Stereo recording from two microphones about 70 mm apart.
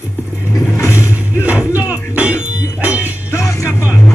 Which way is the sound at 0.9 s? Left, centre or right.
Right.